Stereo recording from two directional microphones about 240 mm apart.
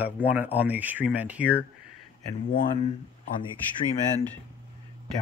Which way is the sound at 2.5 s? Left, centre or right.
Left.